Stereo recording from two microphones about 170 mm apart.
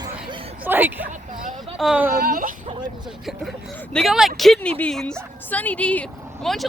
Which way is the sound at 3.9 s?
Centre (ahead or behind).